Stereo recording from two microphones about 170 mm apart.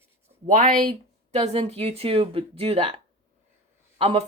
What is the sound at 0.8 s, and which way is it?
Speech, 35° right (ahead or behind).